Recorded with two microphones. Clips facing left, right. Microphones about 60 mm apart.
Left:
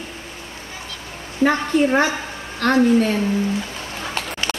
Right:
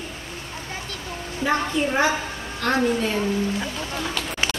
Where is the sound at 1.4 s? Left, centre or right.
Left.